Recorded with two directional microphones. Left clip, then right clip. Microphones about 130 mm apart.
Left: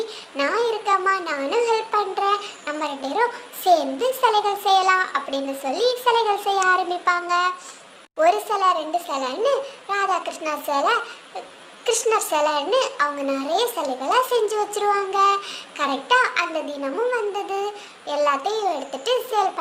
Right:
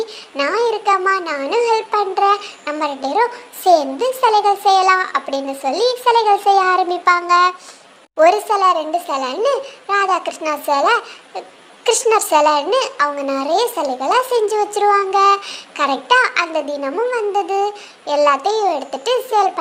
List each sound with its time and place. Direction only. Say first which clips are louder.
0.0 s a child's voice: right 4 dB; 35° right (ahead or behind)